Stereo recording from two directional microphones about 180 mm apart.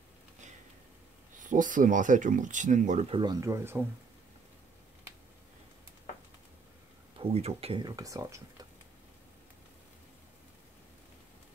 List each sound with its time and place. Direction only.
1.4 s speech: 45° right (ahead or behind)
3.2 s speech: 20° right (ahead or behind)
7.2 s speech: 35° right (ahead or behind); by 8.4 s 20° right (ahead or behind)